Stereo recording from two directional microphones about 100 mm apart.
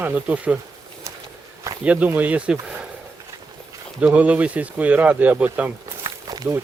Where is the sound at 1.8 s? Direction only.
15° right (ahead or behind).